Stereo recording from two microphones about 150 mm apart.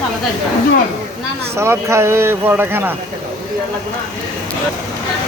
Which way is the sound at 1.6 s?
15° right (ahead or behind).